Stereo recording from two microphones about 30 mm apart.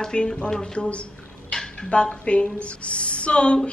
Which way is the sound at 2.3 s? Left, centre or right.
Left.